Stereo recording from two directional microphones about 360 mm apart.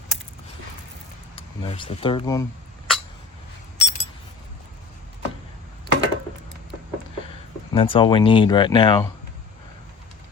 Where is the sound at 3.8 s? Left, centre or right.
Centre.